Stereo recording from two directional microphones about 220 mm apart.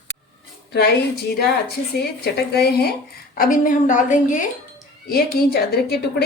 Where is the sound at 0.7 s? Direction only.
45° left (ahead or behind).